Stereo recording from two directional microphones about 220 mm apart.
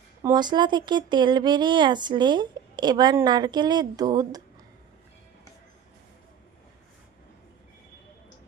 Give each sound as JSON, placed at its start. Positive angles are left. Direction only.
{"t": 0.2, "sound": "speech", "side_deg": -15}